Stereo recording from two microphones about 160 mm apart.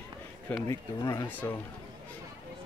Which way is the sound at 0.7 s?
20° left (ahead or behind).